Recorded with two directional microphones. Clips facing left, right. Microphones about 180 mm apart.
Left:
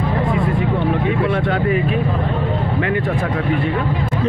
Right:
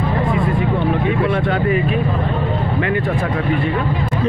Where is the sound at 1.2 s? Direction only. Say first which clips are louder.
Right 1 dB; 5° right (ahead or behind).